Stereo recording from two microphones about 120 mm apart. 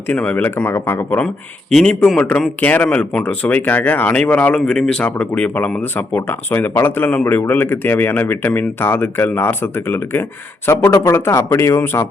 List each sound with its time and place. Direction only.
0.1 s speech: 10° left (ahead or behind)
1.7 s speech: 10° left (ahead or behind)